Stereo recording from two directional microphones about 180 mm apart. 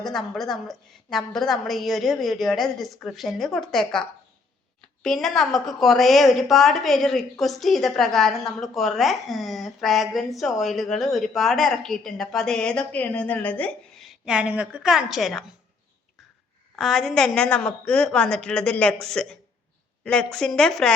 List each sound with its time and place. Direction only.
0.0 s a woman's voice: centre (ahead or behind)
5.0 s a woman's voice: 5° left (ahead or behind)
16.7 s a woman's voice: centre (ahead or behind)